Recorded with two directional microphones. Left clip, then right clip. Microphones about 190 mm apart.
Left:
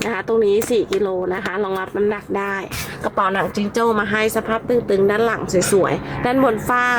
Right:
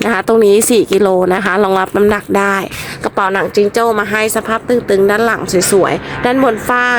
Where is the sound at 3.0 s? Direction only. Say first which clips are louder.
Right 5 dB; 40° right (ahead or behind).